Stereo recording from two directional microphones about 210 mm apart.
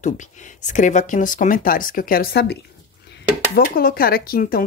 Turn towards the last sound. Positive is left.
turn(degrees=45)  # may be behind; listen again after turning